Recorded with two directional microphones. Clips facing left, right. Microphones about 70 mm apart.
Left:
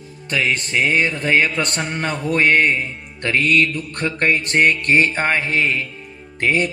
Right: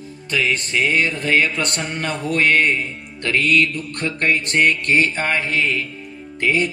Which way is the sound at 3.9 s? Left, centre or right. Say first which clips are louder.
Left 1 dB; left.